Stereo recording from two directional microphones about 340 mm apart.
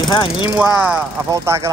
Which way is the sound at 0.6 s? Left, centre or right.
Centre.